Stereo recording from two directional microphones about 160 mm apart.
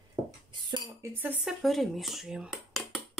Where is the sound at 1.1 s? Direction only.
10° right (ahead or behind).